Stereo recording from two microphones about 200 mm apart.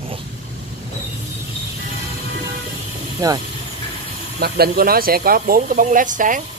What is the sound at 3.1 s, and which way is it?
Speech, 20° right (ahead or behind).